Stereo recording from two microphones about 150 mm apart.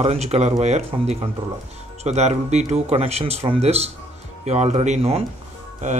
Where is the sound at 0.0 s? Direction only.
45° right (ahead or behind).